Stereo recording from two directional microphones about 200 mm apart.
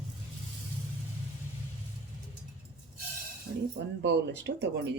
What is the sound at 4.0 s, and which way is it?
Speech, 60° right (ahead or behind).